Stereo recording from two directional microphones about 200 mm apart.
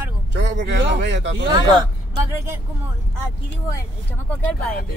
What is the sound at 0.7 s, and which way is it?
Speech, 60° right (ahead or behind).